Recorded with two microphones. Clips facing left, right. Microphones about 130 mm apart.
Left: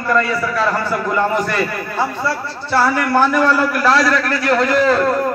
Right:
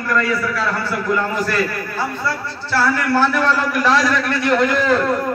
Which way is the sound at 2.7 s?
20° left (ahead or behind).